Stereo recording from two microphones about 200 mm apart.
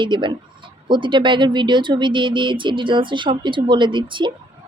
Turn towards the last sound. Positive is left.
turn(degrees=-25)  # may be behind; listen again after turning